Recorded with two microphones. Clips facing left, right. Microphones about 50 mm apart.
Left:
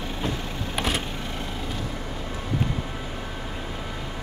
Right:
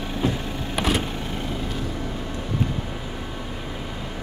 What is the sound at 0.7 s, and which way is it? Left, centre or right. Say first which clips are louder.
Vehicle: right 4 dB; centre.